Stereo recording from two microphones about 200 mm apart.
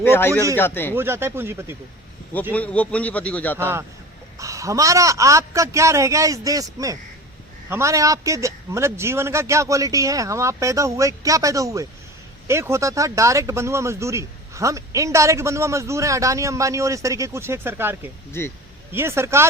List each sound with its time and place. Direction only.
0.0 s speech: 10° left (ahead or behind)
0.9 s speech: 10° right (ahead or behind)
2.5 s speech: 5° left (ahead or behind)
3.6 s speech: 10° right (ahead or behind)
18.3 s speech: 10° left (ahead or behind)
18.9 s speech: 10° right (ahead or behind)